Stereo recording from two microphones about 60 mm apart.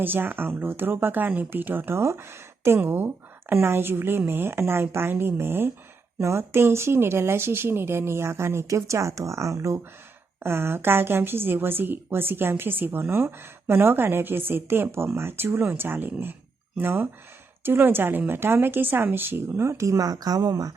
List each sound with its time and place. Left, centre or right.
0.0 s a woman's voice: right
2.0 s a woman's voice: right
8.6 s speech: right
10.4 s a woman's voice: right
19.6 s speech: right